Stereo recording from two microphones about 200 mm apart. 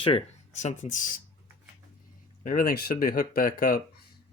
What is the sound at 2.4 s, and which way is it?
Speech, 45° left (ahead or behind).